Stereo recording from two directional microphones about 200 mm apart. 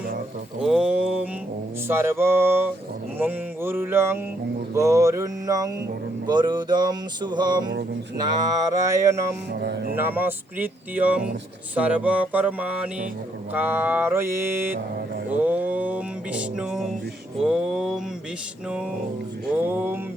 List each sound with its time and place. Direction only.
0.6 s a sound: 5° right (ahead or behind)
1.9 s speech: 10° right (ahead or behind)
6.2 s music: 20° right (ahead or behind)
8.2 s speech: 20° right (ahead or behind)
9.5 s music: 55° right (ahead or behind)
9.9 s speech: 10° right (ahead or behind)
15.3 s music: 10° right (ahead or behind)
17.4 s a sound: 5° right (ahead or behind)
19.5 s speech: 10° right (ahead or behind)